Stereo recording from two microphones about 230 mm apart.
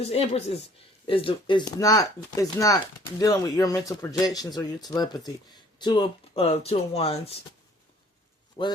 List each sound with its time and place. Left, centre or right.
0.0 s speech: left